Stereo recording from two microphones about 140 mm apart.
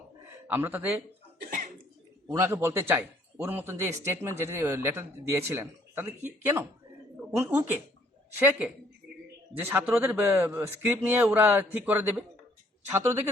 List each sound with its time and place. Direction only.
0.3 s a man's voice: 15° right (ahead or behind)
1.5 s cough: 70° right (ahead or behind)
2.2 s a man's voice: 15° right (ahead or behind)